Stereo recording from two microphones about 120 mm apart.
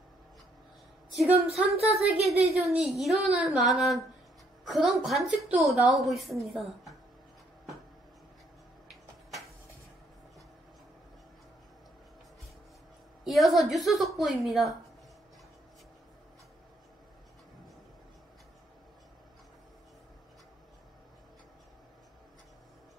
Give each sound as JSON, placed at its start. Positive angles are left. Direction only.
{"t": 1.5, "sound": "a woman's voice", "side_deg": 0}
{"t": 2.3, "sound": "a woman's voice", "side_deg": -60}
{"t": 2.6, "sound": "a woman's voice", "side_deg": -5}
{"t": 13.2, "sound": "a woman's voice", "side_deg": 0}